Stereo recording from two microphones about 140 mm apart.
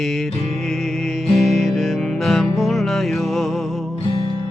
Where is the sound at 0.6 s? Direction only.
Centre (ahead or behind).